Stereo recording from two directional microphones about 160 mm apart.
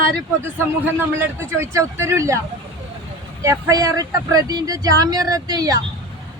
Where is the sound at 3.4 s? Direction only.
20° right (ahead or behind).